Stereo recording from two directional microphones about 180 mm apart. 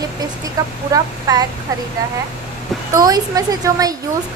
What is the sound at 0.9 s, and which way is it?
Speech, 20° right (ahead or behind).